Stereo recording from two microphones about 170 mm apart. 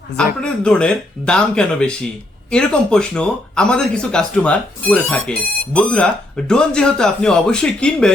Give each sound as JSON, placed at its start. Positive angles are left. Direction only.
{"t": 0.1, "sound": "speech", "side_deg": 90}
{"t": 0.4, "sound": "speech", "side_deg": 5}